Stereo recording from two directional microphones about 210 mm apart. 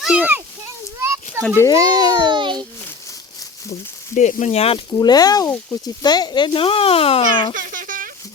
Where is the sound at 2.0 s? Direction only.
20° right (ahead or behind).